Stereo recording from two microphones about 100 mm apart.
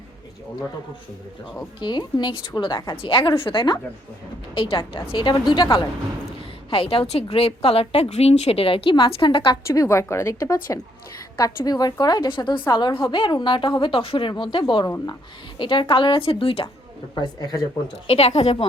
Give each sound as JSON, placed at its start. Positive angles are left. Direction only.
{"t": 1.8, "sound": "a woman's voice", "side_deg": 45}
{"t": 6.7, "sound": "a woman's voice", "side_deg": 65}
{"t": 7.1, "sound": "a woman's voice", "side_deg": 85}
{"t": 9.6, "sound": "a woman's voice", "side_deg": 30}
{"t": 17.2, "sound": "a woman's voice", "side_deg": 45}
{"t": 17.9, "sound": "a woman's voice", "side_deg": 90}